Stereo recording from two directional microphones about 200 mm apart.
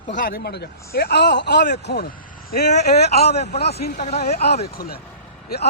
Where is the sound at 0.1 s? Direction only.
45° left (ahead or behind).